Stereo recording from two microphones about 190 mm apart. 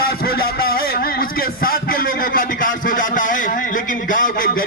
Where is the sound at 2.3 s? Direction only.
45° left (ahead or behind).